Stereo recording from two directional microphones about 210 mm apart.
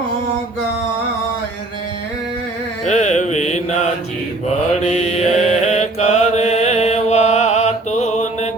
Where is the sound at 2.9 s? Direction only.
35° left (ahead or behind).